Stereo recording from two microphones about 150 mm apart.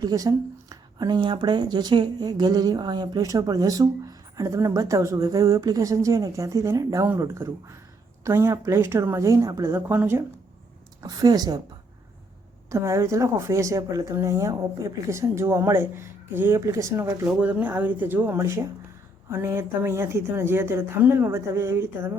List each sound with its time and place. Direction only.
0.0 s speech: 25° right (ahead or behind)
11.0 s speech: 25° right (ahead or behind)
12.7 s speech: 20° right (ahead or behind)
17.2 s a woman's voice: 10° right (ahead or behind)